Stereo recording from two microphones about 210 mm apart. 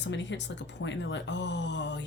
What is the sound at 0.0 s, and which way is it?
Speech, 60° left (ahead or behind).